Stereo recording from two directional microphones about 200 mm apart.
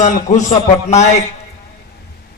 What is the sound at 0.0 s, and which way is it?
A man's voice, 35° left (ahead or behind).